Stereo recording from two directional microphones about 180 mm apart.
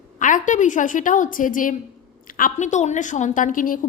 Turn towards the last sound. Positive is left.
turn(degrees=50)  # may be behind; listen again after turning